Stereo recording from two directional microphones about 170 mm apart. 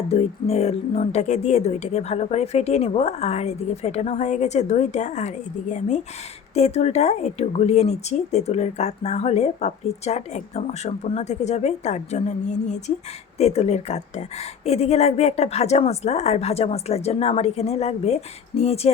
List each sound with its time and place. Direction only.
0.1 s a woman's voice: 35° left (ahead or behind)